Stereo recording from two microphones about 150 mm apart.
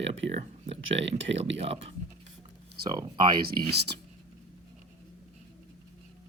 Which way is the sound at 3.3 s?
90° right.